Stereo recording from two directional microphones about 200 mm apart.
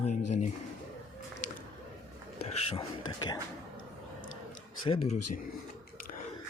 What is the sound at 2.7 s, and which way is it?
Speech, 30° left (ahead or behind).